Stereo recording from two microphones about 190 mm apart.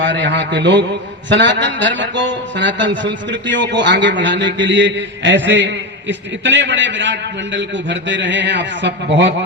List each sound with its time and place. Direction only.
0.0 s speech: 70° right (ahead or behind)